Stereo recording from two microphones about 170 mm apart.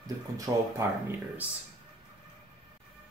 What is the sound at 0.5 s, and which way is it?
Speech, 15° right (ahead or behind).